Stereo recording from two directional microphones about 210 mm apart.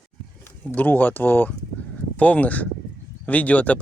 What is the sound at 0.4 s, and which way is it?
Speech, 10° left (ahead or behind).